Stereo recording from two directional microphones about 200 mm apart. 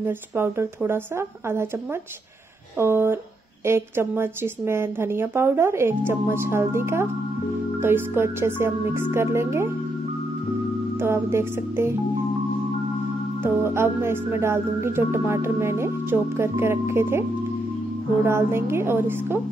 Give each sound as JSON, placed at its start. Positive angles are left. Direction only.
{"t": 0.0, "sound": "speech", "side_deg": -10}
{"t": 2.8, "sound": "speech", "side_deg": -10}
{"t": 11.0, "sound": "speech", "side_deg": -10}
{"t": 13.4, "sound": "speech", "side_deg": -10}
{"t": 18.2, "sound": "speech", "side_deg": -10}